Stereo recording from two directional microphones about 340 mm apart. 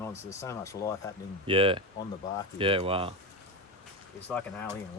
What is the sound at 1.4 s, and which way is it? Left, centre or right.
Speech, centre.